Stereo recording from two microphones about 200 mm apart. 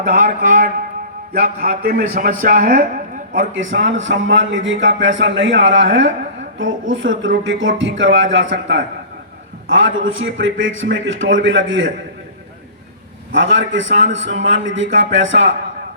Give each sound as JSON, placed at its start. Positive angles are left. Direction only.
{"t": 0.0, "sound": "a man's voice", "side_deg": -40}
{"t": 3.5, "sound": "a man's voice", "side_deg": -70}
{"t": 13.3, "sound": "a man's voice", "side_deg": -70}